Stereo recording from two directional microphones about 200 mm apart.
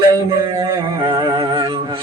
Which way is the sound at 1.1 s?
20° right (ahead or behind).